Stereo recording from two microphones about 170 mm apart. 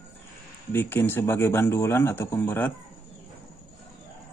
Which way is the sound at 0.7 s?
10° left (ahead or behind).